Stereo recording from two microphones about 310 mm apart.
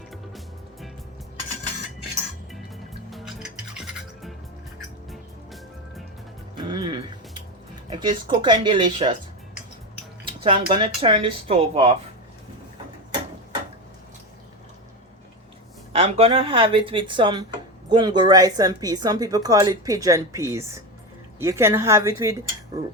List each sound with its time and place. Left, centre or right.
0.1 s music: centre
3.1 s music: centre
6.7 s music: centre
7.9 s speech: centre
10.2 s speech: centre
15.9 s speech: centre